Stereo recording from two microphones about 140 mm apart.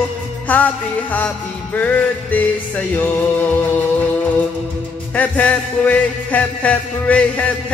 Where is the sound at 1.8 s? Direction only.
10° left (ahead or behind).